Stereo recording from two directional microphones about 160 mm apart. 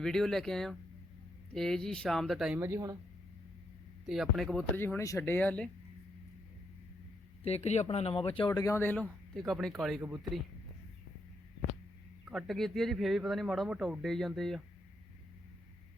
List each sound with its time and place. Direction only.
0.0 s speech: 5° left (ahead or behind)
2.6 s speech: 15° right (ahead or behind)
4.0 s speech: centre (ahead or behind)
7.4 s speech: 40° left (ahead or behind)
8.4 s speech: 25° left (ahead or behind); by 10.0 s centre (ahead or behind)
12.3 s speech: centre (ahead or behind)